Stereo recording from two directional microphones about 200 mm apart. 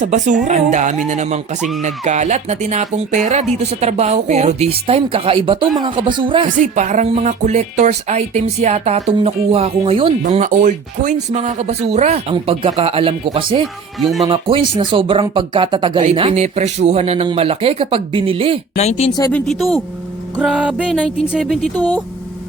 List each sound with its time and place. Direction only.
0.0 s speech: 35° right (ahead or behind)
6.6 s speech: 35° right (ahead or behind)
14.0 s music: centre (ahead or behind)
14.3 s speech: 25° right (ahead or behind)
18.8 s a woman's voice: 30° left (ahead or behind)
19.3 s music: centre (ahead or behind)